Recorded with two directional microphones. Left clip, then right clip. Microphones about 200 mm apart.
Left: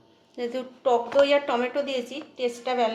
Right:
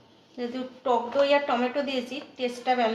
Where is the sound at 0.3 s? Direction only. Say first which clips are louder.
Left 3 dB; 60° left (ahead or behind).